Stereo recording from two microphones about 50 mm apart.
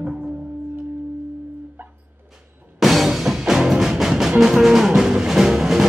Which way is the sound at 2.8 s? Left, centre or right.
Centre.